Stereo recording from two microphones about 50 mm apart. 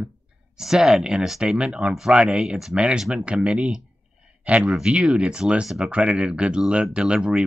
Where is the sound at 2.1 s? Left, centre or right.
Right.